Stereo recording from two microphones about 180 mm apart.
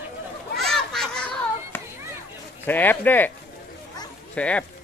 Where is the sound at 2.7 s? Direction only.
10° left (ahead or behind).